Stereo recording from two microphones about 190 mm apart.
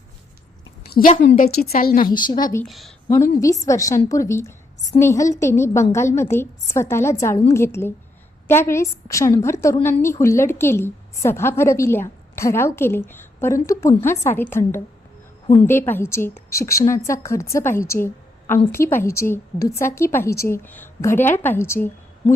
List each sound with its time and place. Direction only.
0.9 s a woman's voice: 45° left (ahead or behind)
1.4 s a woman's voice: 55° left (ahead or behind)
2.1 s a woman's voice: 25° left (ahead or behind)
2.6 s speech: centre (ahead or behind)
3.1 s a woman's voice: 15° left (ahead or behind)
15.6 s a woman's voice: 10° left (ahead or behind)